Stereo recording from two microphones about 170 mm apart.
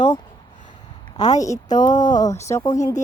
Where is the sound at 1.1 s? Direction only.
20° left (ahead or behind).